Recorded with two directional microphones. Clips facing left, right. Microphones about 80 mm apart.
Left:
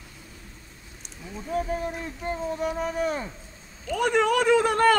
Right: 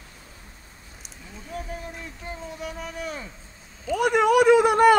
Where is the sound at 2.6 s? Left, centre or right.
Left.